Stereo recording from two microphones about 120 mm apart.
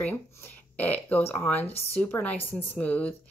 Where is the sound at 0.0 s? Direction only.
15° left (ahead or behind).